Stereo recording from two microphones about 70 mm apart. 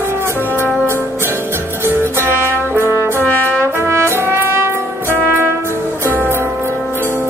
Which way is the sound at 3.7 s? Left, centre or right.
Right.